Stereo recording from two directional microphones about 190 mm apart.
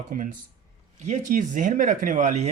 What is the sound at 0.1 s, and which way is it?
Speech, 45° right (ahead or behind).